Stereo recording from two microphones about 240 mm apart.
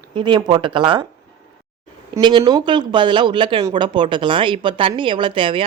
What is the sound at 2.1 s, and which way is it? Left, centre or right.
Speech, centre.